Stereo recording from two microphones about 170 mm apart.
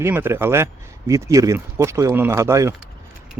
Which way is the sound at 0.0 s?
15° right (ahead or behind).